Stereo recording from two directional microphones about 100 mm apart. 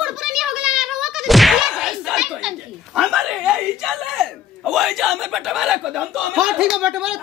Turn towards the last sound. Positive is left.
turn(degrees=-5)  # may be behind; listen again after turning